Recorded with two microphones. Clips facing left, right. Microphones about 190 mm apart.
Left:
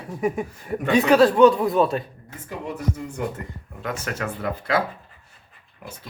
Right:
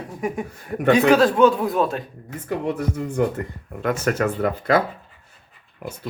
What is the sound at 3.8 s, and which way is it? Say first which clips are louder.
Speech: right 8 dB; 50° right (ahead or behind).